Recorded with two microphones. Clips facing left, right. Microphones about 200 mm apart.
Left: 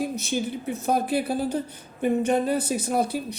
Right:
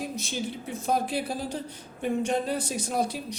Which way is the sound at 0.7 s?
60° left (ahead or behind).